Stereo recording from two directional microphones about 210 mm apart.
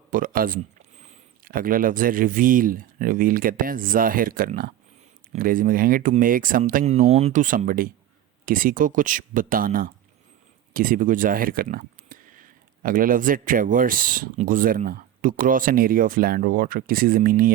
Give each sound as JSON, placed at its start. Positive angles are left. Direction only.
{"t": 0.1, "sound": "speech", "side_deg": -40}